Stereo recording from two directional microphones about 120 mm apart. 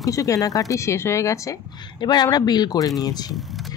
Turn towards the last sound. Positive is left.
turn(degrees=35)  # may be behind; listen again after turning